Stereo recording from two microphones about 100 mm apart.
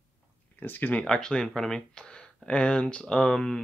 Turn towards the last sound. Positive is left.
turn(degrees=5)  # may be behind; listen again after turning